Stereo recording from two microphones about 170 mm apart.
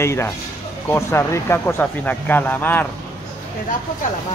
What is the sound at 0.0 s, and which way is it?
Speech, 15° left (ahead or behind).